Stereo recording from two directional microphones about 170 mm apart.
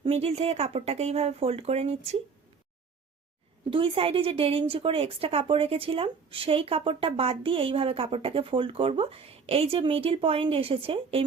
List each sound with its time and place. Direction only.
0.0 s a woman's voice: 35° right (ahead or behind)
3.7 s a woman's voice: 30° right (ahead or behind)